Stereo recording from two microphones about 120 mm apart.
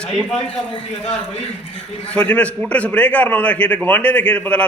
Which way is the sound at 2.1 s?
10° left (ahead or behind).